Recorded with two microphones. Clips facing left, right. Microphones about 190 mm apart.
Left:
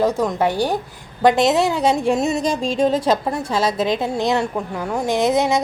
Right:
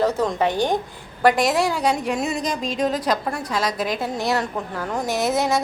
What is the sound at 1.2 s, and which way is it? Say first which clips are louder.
A woman's voice: left 3 dB; 20° left (ahead or behind).